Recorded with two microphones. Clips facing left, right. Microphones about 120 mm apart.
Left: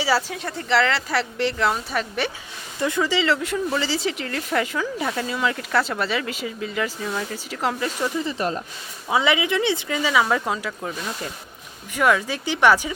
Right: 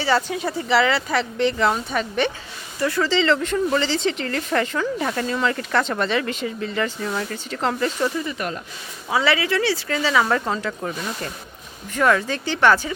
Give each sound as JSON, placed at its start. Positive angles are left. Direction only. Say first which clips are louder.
{"t": 0.0, "sound": "speech", "louder": "right 2 dB", "side_deg": 5}
{"t": 2.8, "sound": "speech", "louder": "right 2 dB", "side_deg": 15}
{"t": 8.2, "sound": "speech", "louder": "left 2 dB", "side_deg": 30}
{"t": 9.0, "sound": "speech", "louder": "even", "side_deg": 20}